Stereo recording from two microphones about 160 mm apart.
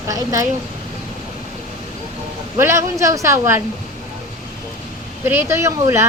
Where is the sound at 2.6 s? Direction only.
15° right (ahead or behind).